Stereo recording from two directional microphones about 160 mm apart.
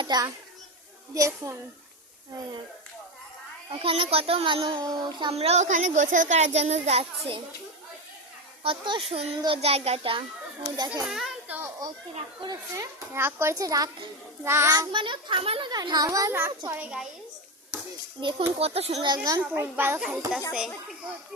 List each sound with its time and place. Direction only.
0.0 s a child's voice: 25° right (ahead or behind)
3.7 s a child's voice: 35° right (ahead or behind)
5.3 s a child's voice: 40° right (ahead or behind)
8.6 s a child's voice: 30° right (ahead or behind)
10.6 s a child's voice: 20° right (ahead or behind)
11.0 s children playing: 5° right (ahead or behind)
12.4 s a child's voice: 25° right (ahead or behind); by 17.1 s 10° right (ahead or behind)
18.2 s a child's voice: 30° right (ahead or behind)
19.0 s a child's voice: 25° right (ahead or behind)
19.4 s a child's voice: 10° right (ahead or behind)
20.0 s a child's voice: 5° right (ahead or behind)